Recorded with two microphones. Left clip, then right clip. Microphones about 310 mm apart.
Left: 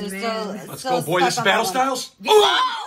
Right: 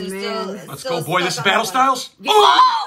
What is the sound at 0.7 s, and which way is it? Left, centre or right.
Speech, centre.